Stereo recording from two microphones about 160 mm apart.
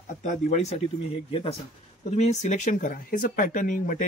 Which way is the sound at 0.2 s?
50° left (ahead or behind).